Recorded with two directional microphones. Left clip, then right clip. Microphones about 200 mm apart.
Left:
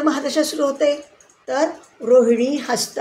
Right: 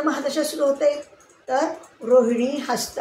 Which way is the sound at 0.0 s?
50° left (ahead or behind).